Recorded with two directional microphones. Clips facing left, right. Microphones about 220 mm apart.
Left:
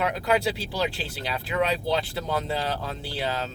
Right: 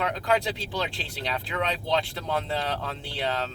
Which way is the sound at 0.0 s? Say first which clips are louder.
Left 2 dB; 5° left (ahead or behind).